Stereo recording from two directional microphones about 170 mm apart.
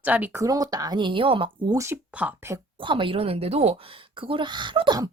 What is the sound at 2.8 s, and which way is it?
Speech, 30° right (ahead or behind).